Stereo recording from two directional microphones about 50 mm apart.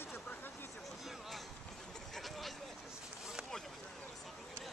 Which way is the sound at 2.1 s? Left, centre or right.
Centre.